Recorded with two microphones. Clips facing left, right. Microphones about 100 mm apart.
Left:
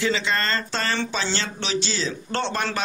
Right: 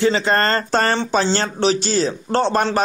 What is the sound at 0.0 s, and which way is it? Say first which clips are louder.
Speech: right 7 dB; 40° right (ahead or behind).